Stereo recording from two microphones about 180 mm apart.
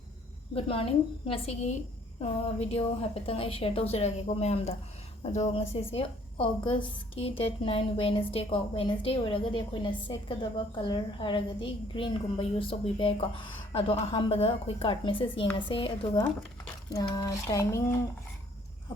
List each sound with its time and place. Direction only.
0.5 s a woman's voice: 30° left (ahead or behind)
17.2 s speech: 20° left (ahead or behind)